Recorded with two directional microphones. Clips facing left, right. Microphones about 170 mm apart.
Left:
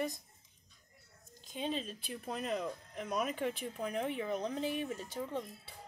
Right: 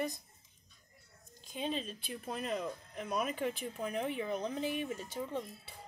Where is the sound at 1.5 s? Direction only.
Centre (ahead or behind).